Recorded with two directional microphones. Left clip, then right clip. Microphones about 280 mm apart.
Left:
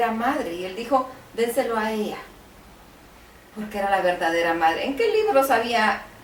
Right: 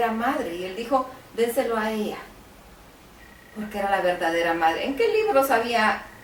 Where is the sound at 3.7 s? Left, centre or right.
Centre.